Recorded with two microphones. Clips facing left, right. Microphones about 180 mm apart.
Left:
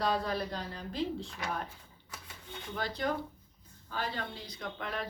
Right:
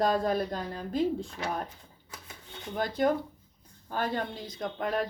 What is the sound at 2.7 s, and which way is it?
Speech, 50° right (ahead or behind).